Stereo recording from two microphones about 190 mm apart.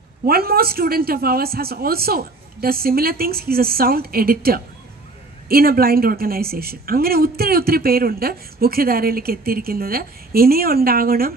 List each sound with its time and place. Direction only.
0.3 s a woman's voice: 55° right (ahead or behind)